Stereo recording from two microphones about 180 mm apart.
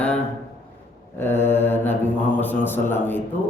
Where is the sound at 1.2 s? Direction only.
10° left (ahead or behind).